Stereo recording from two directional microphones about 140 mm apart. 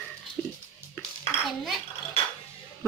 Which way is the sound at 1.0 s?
15° left (ahead or behind).